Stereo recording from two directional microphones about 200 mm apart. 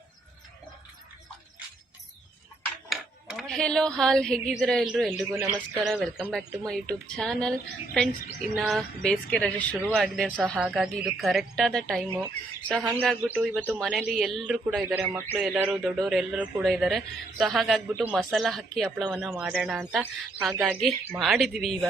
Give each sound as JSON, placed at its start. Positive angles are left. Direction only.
{"t": 2.9, "sound": "speech", "side_deg": 0}
{"t": 5.3, "sound": "a man's voice", "side_deg": -10}
{"t": 5.8, "sound": "a man's voice", "side_deg": 0}
{"t": 8.5, "sound": "a man's voice", "side_deg": 0}
{"t": 12.8, "sound": "a man's voice", "side_deg": -15}